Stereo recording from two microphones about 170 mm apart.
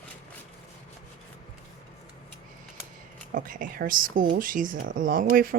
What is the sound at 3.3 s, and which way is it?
Speech, 55° right (ahead or behind).